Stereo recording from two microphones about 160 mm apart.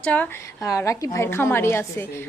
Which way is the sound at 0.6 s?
20° left (ahead or behind).